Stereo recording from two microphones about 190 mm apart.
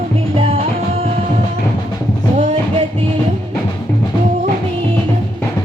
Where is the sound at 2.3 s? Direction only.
35° right (ahead or behind).